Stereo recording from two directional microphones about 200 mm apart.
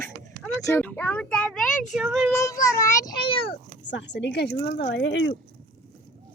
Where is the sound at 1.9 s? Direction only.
Centre (ahead or behind).